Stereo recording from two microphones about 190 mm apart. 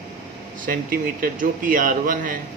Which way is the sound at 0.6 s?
45° right (ahead or behind).